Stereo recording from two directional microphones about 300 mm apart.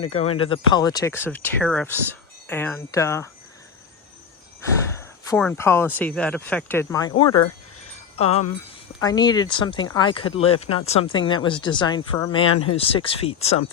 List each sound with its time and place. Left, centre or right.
0.1 s speech: centre
4.9 s speech: centre
7.3 s speech: left
8.1 s speech: centre